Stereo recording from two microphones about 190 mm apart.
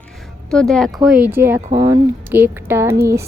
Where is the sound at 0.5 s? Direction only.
5° left (ahead or behind).